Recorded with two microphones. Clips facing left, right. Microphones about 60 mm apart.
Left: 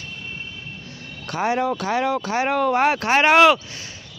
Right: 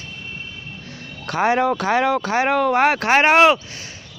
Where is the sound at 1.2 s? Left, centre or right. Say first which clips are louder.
Right 4 dB; right.